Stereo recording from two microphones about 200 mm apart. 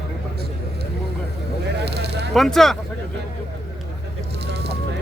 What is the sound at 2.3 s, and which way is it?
Speech, centre (ahead or behind).